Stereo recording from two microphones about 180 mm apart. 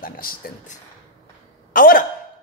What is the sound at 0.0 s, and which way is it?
Speech, 50° left (ahead or behind).